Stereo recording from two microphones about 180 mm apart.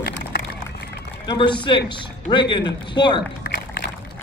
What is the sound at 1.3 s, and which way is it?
Speech, 25° left (ahead or behind).